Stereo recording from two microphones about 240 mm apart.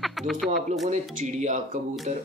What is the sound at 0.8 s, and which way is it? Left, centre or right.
A man's voice, right.